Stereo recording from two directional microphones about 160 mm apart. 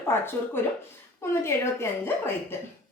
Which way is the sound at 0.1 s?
15° left (ahead or behind).